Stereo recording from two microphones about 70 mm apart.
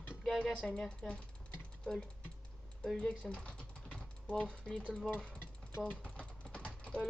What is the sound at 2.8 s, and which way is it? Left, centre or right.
Speech, centre.